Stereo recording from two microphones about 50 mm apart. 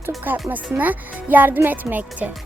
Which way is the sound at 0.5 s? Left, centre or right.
Right.